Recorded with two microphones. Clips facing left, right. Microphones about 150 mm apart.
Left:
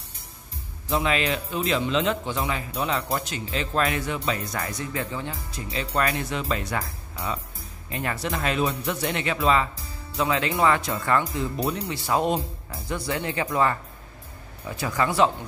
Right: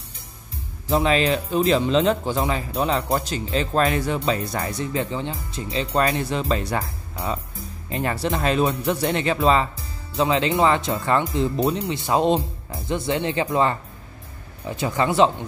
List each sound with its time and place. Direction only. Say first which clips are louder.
0.8 s speech: right 5 dB; 35° right (ahead or behind)
14.8 s speech: right 3 dB; 25° right (ahead or behind)